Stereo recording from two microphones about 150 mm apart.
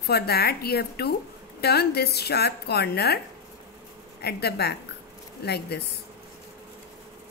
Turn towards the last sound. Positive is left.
turn(degrees=90)